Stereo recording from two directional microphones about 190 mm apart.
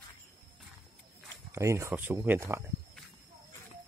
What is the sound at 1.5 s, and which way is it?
Speech, 15° right (ahead or behind).